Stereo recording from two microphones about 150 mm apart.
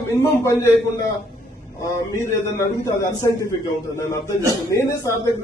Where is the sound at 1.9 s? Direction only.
20° left (ahead or behind).